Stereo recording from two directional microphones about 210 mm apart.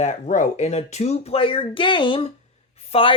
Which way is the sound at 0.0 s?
35° left (ahead or behind).